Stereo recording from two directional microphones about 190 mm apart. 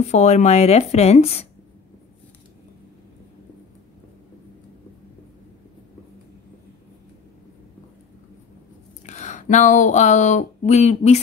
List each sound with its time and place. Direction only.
0.0 s speech: 35° left (ahead or behind)
9.0 s speech: 40° left (ahead or behind)